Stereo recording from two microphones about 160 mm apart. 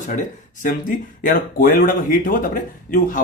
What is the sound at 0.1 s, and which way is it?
Speech, 55° left (ahead or behind).